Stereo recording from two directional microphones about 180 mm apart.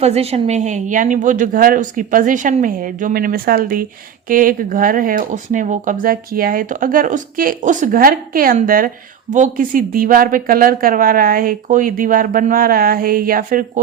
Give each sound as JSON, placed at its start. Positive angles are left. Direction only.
{"t": 0.0, "sound": "speech", "side_deg": -35}